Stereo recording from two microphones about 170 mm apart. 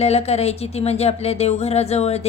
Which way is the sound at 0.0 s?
40° left (ahead or behind).